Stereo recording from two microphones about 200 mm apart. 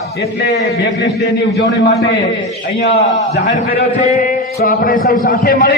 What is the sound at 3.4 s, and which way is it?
Speech, 40° left (ahead or behind).